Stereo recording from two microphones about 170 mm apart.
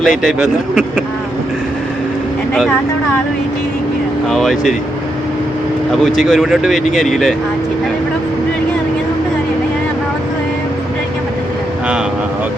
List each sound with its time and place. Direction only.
0.0 s speech: centre (ahead or behind)
4.3 s speech: centre (ahead or behind)
6.2 s speech: centre (ahead or behind)